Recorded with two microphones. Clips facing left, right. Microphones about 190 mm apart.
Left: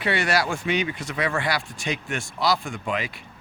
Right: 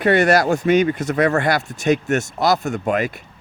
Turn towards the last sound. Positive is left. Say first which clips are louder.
# right 8 dB
turn(degrees=-50)  # may be behind; listen again after turning